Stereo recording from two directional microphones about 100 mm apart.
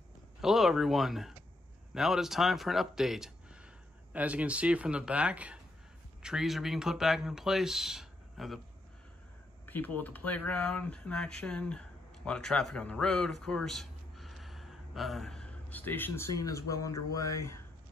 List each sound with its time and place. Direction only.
0.4 s speech: centre (ahead or behind)
4.1 s speech: 15° right (ahead or behind)
9.7 s a man's voice: 20° left (ahead or behind)
15.7 s speech: 20° left (ahead or behind)
16.3 s speech: 35° left (ahead or behind)